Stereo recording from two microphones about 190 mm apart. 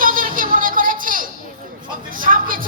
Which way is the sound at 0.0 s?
45° right (ahead or behind).